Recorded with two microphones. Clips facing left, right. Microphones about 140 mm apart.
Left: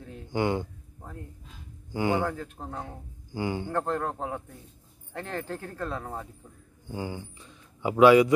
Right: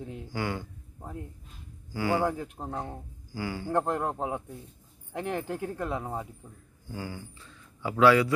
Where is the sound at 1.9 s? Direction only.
20° left (ahead or behind).